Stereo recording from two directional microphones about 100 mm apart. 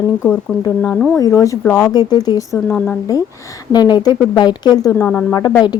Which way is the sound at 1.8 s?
45° left (ahead or behind).